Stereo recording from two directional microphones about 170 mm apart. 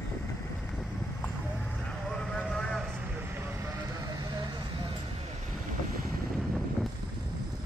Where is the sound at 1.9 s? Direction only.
5° left (ahead or behind).